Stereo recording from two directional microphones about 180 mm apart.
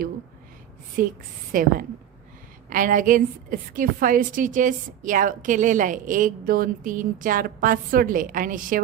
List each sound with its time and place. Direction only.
1.0 s a woman's voice: 50° right (ahead or behind)